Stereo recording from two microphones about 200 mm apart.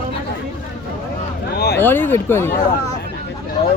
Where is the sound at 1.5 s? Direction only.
50° left (ahead or behind).